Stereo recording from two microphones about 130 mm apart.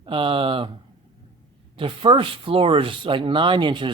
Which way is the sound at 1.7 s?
40° right (ahead or behind).